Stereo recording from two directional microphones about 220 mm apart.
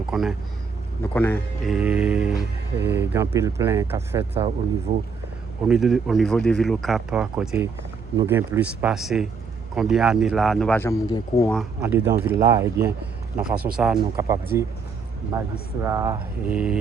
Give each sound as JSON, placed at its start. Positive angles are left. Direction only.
{"t": 0.1, "sound": "speech", "side_deg": -5}
{"t": 1.0, "sound": "speech", "side_deg": 10}
{"t": 1.6, "sound": "speech", "side_deg": -5}
{"t": 4.9, "sound": "speech", "side_deg": -30}
{"t": 5.6, "sound": "speech", "side_deg": 0}
{"t": 11.5, "sound": "speech", "side_deg": -5}
{"t": 15.8, "sound": "speech", "side_deg": -15}